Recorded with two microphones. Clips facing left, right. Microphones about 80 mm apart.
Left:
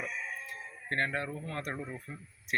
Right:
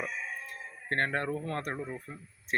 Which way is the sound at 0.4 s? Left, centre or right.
Right.